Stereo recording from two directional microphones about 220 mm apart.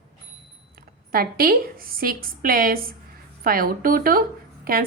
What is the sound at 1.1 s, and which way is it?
A woman's voice, 40° right (ahead or behind).